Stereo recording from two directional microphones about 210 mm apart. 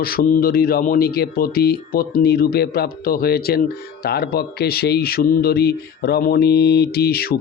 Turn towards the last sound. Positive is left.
turn(degrees=45)  # may be behind; listen again after turning